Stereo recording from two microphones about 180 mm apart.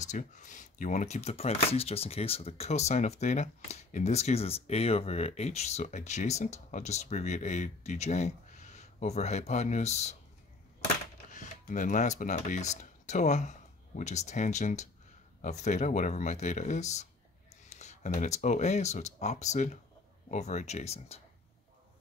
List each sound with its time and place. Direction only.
0.0 s speech: 45° left (ahead or behind)
11.3 s speech: 45° left (ahead or behind)